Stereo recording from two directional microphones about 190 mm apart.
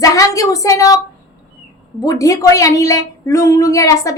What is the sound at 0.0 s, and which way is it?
Speech, 15° left (ahead or behind).